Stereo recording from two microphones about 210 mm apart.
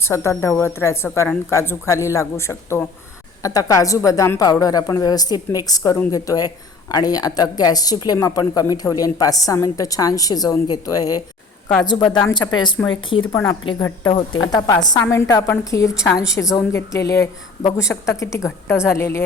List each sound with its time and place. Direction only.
0.0 s a woman's voice: 10° left (ahead or behind)